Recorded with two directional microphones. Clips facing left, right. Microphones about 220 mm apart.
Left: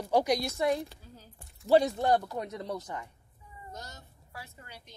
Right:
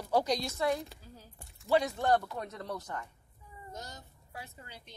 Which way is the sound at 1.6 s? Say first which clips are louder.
Left 5 dB; 35° left (ahead or behind).